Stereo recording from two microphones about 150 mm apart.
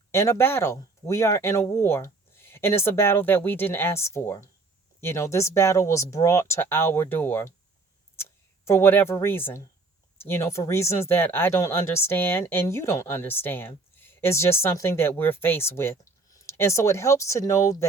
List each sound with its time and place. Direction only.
0.1 s speech: 20° left (ahead or behind)